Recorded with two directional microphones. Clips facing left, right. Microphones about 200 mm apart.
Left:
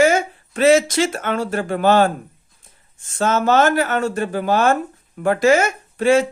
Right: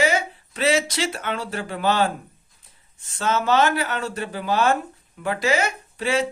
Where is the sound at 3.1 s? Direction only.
50° left (ahead or behind).